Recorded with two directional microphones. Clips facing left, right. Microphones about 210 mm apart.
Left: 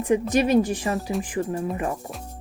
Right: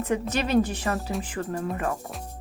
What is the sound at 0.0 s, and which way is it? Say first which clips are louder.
Speech: left 6 dB; 15° left (ahead or behind).